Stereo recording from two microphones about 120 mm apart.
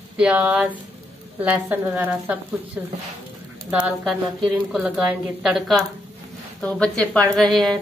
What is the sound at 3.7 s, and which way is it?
A woman's voice, 10° right (ahead or behind).